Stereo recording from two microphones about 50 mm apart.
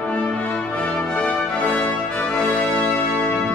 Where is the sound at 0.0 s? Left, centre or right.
Left.